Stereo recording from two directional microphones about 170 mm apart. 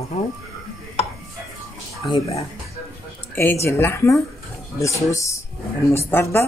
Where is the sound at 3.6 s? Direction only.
15° left (ahead or behind).